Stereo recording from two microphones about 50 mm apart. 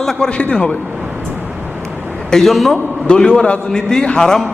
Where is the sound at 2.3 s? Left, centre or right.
Centre.